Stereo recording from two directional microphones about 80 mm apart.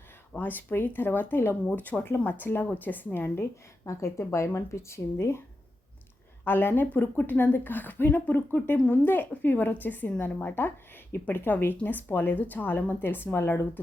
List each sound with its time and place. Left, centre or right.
0.3 s a woman's voice: left
6.4 s a woman's voice: left